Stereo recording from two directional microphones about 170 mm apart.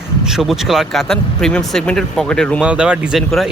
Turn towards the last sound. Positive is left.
turn(degrees=0)  # may be behind; listen again after turning